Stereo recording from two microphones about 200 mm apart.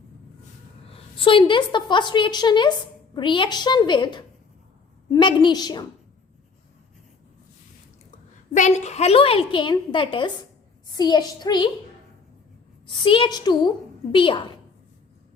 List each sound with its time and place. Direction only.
1.1 s a woman's voice: 25° left (ahead or behind)
8.5 s a woman's voice: 35° left (ahead or behind)
12.9 s a woman's voice: 25° left (ahead or behind)